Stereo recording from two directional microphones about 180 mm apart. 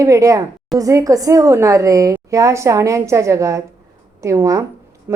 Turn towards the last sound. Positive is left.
turn(degrees=-15)  # may be behind; listen again after turning